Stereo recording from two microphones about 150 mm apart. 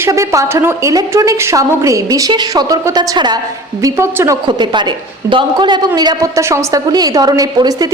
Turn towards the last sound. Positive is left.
turn(degrees=-25)  # may be behind; listen again after turning